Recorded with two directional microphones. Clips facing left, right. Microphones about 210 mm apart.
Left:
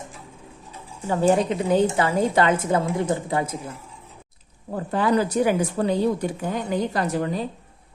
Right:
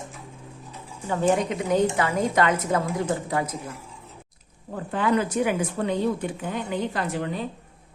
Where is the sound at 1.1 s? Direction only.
30° left (ahead or behind).